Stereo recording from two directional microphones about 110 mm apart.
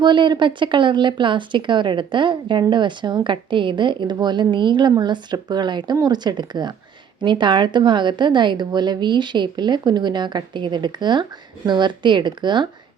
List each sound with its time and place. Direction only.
0.0 s speech: 45° right (ahead or behind)